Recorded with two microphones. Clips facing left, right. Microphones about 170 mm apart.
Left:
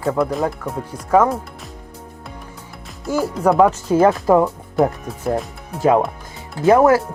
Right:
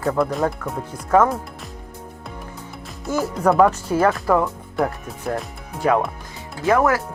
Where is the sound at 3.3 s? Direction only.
Centre (ahead or behind).